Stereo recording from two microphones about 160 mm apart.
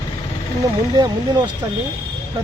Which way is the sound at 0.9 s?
25° right (ahead or behind).